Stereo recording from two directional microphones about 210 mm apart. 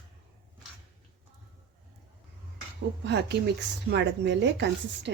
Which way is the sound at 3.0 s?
55° right (ahead or behind).